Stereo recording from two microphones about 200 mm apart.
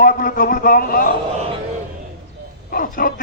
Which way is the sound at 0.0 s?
45° left (ahead or behind).